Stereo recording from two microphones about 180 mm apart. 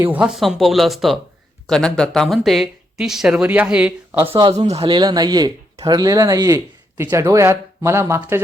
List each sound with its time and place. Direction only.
0.0 s speech: 10° right (ahead or behind)
4.4 s speech: 35° right (ahead or behind); by 8.4 s 15° right (ahead or behind)